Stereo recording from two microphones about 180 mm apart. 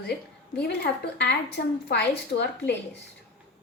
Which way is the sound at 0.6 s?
65° left (ahead or behind).